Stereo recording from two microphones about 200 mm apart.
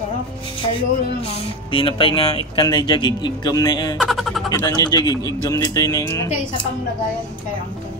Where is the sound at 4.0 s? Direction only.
Centre (ahead or behind).